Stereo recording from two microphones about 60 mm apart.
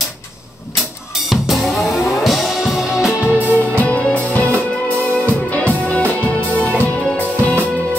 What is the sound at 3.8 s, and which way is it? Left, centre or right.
Music, left.